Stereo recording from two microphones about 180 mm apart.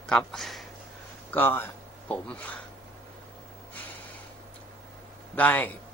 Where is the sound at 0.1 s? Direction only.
5° left (ahead or behind).